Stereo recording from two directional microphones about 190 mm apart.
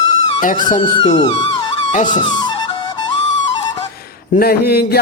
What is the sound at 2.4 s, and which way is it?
Flute, 25° left (ahead or behind).